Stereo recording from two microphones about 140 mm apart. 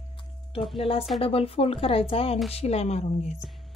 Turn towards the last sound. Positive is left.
turn(degrees=50)  # may be behind; listen again after turning